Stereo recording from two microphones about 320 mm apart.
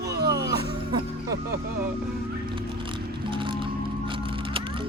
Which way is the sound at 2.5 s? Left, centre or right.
Centre.